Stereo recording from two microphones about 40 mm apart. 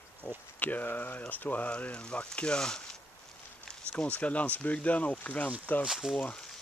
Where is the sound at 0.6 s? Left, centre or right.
Left.